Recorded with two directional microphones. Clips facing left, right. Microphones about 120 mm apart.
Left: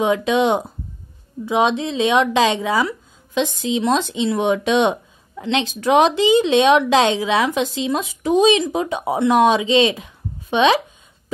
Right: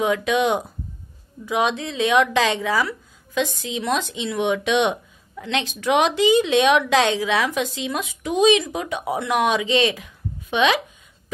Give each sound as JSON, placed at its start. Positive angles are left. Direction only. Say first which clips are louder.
{"t": 0.0, "sound": "a woman's voice", "louder": "left 3 dB", "side_deg": 25}